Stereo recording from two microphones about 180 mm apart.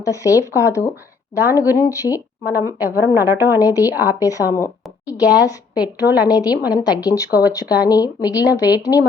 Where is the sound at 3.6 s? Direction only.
20° left (ahead or behind).